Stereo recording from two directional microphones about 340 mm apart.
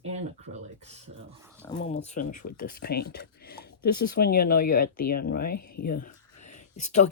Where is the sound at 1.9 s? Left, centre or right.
Left.